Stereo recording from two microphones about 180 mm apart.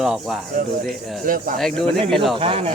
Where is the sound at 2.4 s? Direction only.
30° right (ahead or behind).